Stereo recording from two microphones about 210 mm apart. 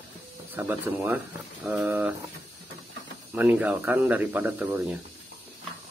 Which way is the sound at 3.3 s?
5° right (ahead or behind).